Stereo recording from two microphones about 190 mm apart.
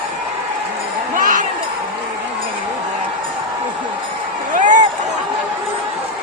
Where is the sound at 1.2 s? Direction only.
45° right (ahead or behind).